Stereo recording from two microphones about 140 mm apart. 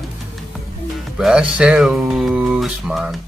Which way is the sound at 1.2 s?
5° right (ahead or behind).